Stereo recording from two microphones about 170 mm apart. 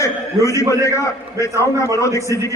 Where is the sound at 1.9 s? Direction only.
20° left (ahead or behind).